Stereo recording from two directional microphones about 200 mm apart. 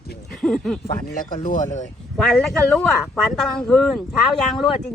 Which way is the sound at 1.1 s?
40° left (ahead or behind).